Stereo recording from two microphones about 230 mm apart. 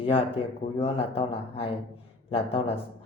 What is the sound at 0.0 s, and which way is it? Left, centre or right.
Speech, left.